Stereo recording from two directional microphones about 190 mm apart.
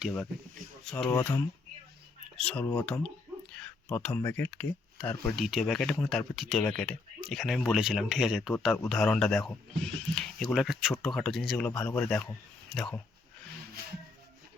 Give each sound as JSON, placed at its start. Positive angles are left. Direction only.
{"t": 0.0, "sound": "speech", "side_deg": 0}
{"t": 1.1, "sound": "speech", "side_deg": 20}
{"t": 2.3, "sound": "speech", "side_deg": 5}